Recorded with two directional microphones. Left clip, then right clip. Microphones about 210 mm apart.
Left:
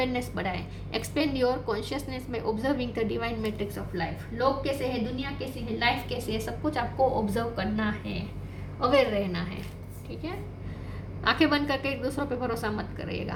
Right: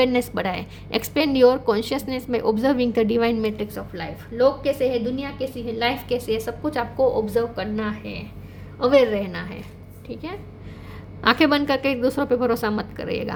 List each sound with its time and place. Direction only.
0.0 s a woman's voice: 55° right (ahead or behind)
11.2 s a woman's voice: 50° right (ahead or behind)